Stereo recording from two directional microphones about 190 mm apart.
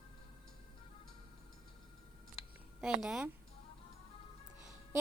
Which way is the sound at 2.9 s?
Centre (ahead or behind).